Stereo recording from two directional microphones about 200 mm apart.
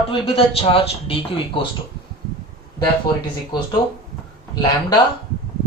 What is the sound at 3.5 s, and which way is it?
Speech, 20° left (ahead or behind).